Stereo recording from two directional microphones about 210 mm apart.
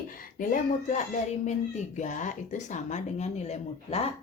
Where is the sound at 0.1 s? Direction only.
40° left (ahead or behind).